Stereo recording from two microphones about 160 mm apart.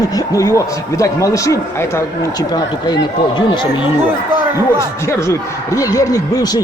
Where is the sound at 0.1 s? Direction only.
20° left (ahead or behind).